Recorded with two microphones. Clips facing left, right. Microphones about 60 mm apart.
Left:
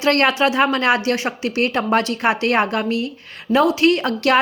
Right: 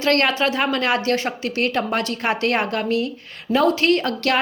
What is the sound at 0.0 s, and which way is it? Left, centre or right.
Speech, left.